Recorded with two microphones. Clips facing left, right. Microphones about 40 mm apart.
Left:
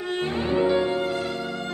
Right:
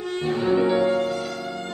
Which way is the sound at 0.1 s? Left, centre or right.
Left.